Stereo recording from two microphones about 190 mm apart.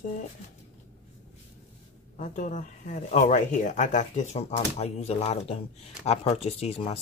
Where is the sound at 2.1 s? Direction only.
40° left (ahead or behind).